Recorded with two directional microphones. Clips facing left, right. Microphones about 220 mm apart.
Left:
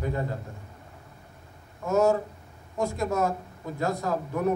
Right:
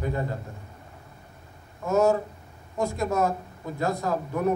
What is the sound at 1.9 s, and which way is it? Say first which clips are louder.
A man's voice: right 1 dB; 20° right (ahead or behind).